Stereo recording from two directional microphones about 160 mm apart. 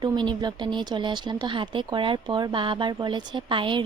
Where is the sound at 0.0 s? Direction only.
25° right (ahead or behind).